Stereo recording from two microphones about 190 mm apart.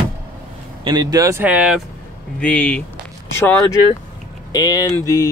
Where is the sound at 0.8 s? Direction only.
20° right (ahead or behind); by 1.8 s 5° right (ahead or behind).